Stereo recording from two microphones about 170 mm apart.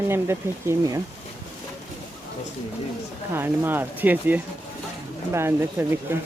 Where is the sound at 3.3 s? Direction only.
10° right (ahead or behind).